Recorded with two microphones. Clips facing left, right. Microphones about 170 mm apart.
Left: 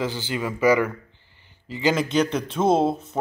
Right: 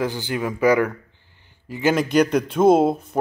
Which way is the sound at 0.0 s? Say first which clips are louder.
Right 3 dB; 15° right (ahead or behind).